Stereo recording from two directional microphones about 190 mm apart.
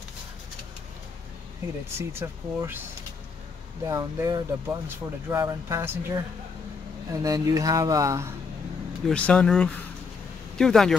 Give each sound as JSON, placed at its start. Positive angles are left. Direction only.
{"t": 2.0, "sound": "speech", "side_deg": -15}
{"t": 3.8, "sound": "speech", "side_deg": -15}
{"t": 7.2, "sound": "speech", "side_deg": -20}
{"t": 9.0, "sound": "speech", "side_deg": 5}